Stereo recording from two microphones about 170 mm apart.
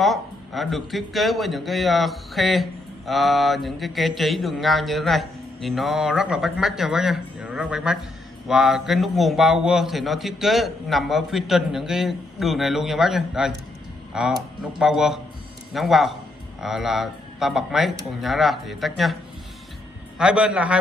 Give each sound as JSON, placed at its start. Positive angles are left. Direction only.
{"t": 0.0, "sound": "a man's voice", "side_deg": 0}
{"t": 20.2, "sound": "a man's voice", "side_deg": -5}